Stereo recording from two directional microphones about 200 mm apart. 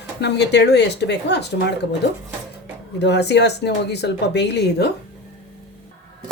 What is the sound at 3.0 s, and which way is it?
Speech, 60° left (ahead or behind).